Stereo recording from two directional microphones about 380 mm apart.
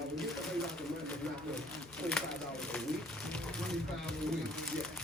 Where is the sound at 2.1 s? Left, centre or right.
Centre.